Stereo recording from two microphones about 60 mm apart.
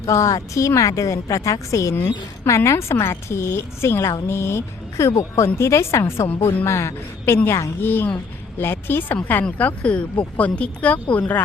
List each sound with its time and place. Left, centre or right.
0.0 s a woman's voice: left
2.6 s a woman's voice: left
7.8 s a woman's voice: left
9.4 s speech: left